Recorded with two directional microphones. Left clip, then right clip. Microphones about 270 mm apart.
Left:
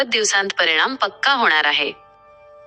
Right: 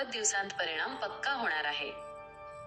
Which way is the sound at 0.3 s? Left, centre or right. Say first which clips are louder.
Left 18 dB; left.